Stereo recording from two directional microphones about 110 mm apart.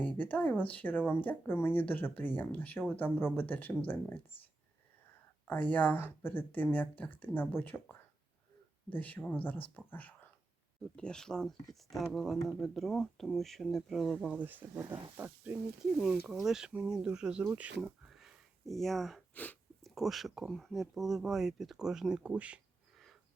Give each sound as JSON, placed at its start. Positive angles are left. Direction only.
{"t": 0.0, "sound": "speech", "side_deg": 15}
{"t": 5.5, "sound": "speech", "side_deg": 15}
{"t": 14.3, "sound": "speech", "side_deg": -15}
{"t": 17.4, "sound": "speech", "side_deg": -20}
{"t": 17.8, "sound": "a sound", "side_deg": 0}
{"t": 19.3, "sound": "speech", "side_deg": 15}
{"t": 19.8, "sound": "speech", "side_deg": 0}